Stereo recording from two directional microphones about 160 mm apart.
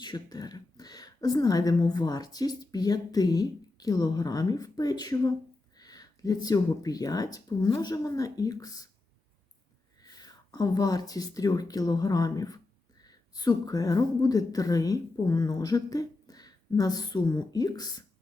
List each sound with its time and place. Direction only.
0.0 s speech: 25° left (ahead or behind)
10.0 s a woman's voice: 25° left (ahead or behind)